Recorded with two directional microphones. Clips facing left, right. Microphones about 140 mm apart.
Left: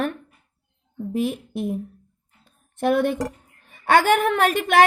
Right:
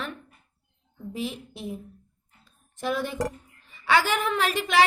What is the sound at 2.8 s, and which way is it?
A woman's voice, 60° left (ahead or behind).